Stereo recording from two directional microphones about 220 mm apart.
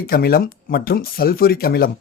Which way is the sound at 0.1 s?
45° left (ahead or behind).